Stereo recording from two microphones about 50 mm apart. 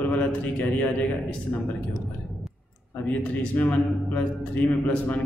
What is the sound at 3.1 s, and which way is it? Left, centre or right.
A man's voice, left.